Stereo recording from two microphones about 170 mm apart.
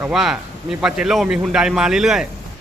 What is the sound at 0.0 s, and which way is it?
Speech, centre (ahead or behind).